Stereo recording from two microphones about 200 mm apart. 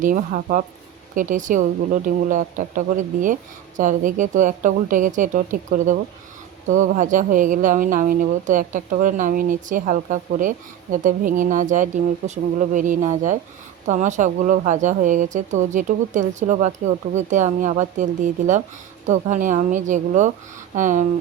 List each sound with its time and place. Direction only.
0.0 s speech: 40° right (ahead or behind)